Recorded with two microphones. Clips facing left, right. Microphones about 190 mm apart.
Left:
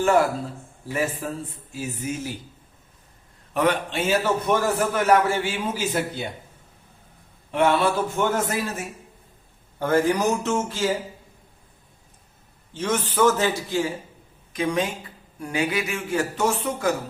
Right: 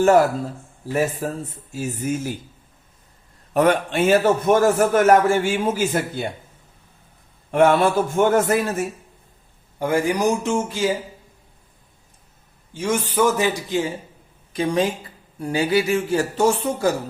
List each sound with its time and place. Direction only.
1.2 s a man's voice: 40° right (ahead or behind)
3.5 s a man's voice: 45° right (ahead or behind)
7.5 s a man's voice: 50° right (ahead or behind)
9.7 s a man's voice: 10° right (ahead or behind)
12.7 s a man's voice: 10° right (ahead or behind)
14.5 s a man's voice: 30° right (ahead or behind)